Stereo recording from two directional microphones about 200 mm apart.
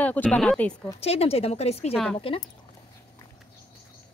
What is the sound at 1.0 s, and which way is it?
Speech, 30° left (ahead or behind).